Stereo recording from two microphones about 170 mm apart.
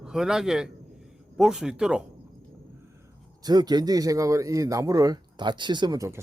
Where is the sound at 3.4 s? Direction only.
25° right (ahead or behind).